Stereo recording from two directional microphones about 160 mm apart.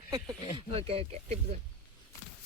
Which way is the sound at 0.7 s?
40° right (ahead or behind).